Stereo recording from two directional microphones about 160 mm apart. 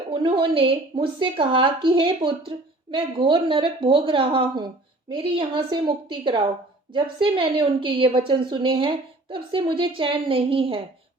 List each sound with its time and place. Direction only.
0.1 s a woman's voice: 30° right (ahead or behind)